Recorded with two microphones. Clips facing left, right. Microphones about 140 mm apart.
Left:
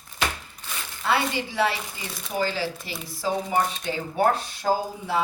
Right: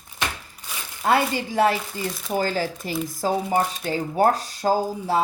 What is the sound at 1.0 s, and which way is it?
A woman's voice, 45° right (ahead or behind).